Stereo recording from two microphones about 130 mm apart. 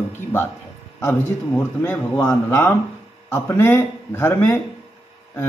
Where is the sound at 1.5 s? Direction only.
15° left (ahead or behind).